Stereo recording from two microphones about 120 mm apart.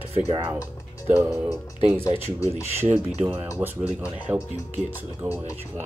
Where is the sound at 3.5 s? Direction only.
15° right (ahead or behind).